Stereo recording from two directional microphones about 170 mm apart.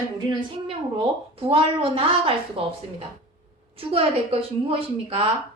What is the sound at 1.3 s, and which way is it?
A woman's voice, 35° right (ahead or behind).